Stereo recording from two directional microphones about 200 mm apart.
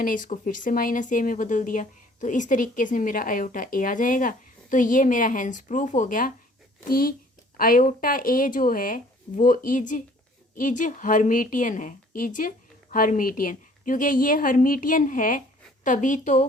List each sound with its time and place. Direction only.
0.0 s speech: 40° left (ahead or behind)
7.5 s speech: 45° left (ahead or behind)